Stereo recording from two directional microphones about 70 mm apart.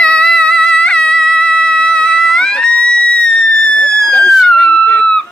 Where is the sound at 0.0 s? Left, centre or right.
Centre.